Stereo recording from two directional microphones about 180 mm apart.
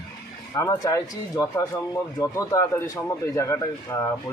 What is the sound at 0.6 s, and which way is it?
A man's voice, 20° left (ahead or behind).